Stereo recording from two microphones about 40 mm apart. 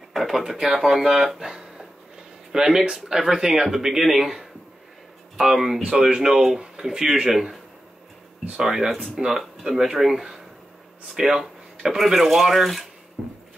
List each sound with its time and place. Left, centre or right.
0.1 s speech: centre
5.9 s speech: centre
8.5 s speech: centre
11.1 s a sound: centre
11.9 s speech: centre
13.2 s a sound: centre